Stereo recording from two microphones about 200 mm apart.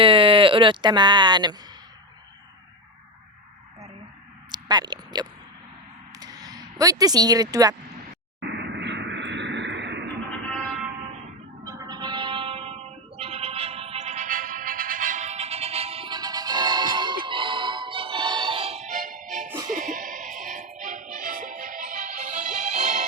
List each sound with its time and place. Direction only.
0.0 s speech: 25° right (ahead or behind)
4.5 s a sound: 20° right (ahead or behind)
6.1 s speech: 20° right (ahead or behind)
8.4 s a sound: 60° right (ahead or behind)
11.6 s music: 20° right (ahead or behind); by 19.5 s 40° right (ahead or behind)
19.5 s music: 15° right (ahead or behind)
19.7 s music: 40° right (ahead or behind)